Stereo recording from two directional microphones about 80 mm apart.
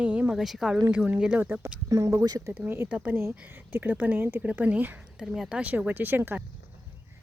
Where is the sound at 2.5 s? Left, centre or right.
Right.